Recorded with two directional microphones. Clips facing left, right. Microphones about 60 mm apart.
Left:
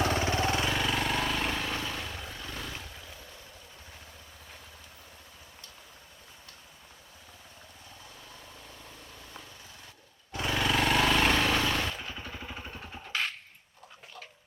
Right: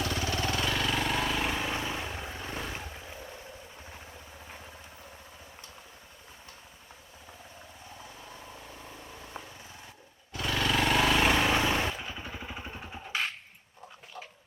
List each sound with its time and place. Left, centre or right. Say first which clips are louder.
0.0 s vehicle: left 4 dB; left
0.6 s vehicle: even; centre; by 3.3 s right
4.4 s vehicle: right 4 dB; right
8.3 s vehicle: right 3 dB; centre
10.4 s vehicle: even; centre